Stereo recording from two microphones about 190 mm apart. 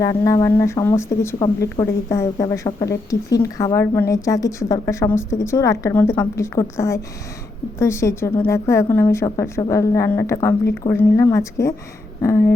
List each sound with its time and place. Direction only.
0.0 s a woman's voice: 20° left (ahead or behind)